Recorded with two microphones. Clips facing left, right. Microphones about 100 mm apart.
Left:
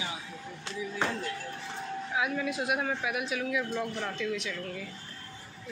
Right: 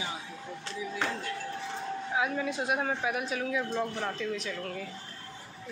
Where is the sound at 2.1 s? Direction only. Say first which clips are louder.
Even; 30° right (ahead or behind).